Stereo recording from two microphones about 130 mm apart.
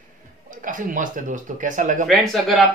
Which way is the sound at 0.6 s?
90° right.